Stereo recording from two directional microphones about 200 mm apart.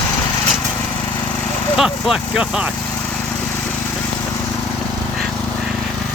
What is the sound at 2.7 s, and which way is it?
Lawn mower, 10° left (ahead or behind).